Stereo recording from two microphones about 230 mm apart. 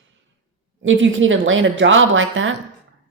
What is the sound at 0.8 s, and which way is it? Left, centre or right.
Speech, right.